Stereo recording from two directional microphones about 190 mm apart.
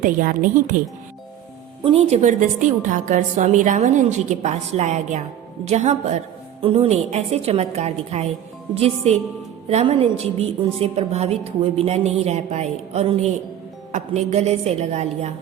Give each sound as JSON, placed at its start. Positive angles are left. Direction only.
{"t": 0.0, "sound": "a woman's voice", "side_deg": -45}
{"t": 1.8, "sound": "a woman's voice", "side_deg": -30}